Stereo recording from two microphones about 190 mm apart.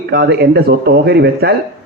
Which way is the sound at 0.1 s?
55° right (ahead or behind).